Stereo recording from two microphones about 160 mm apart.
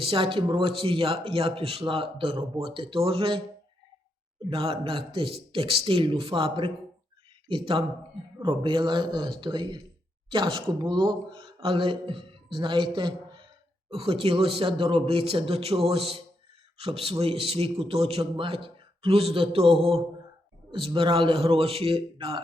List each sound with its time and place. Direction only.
0.0 s a man's voice: 35° right (ahead or behind)
4.4 s a man's voice: 35° right (ahead or behind)
20.7 s a man's voice: 35° right (ahead or behind)